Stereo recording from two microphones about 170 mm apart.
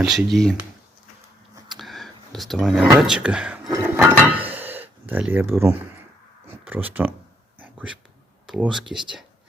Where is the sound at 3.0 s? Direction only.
5° right (ahead or behind).